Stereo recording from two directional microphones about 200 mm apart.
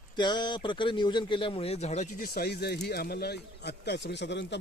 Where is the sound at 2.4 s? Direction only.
50° left (ahead or behind).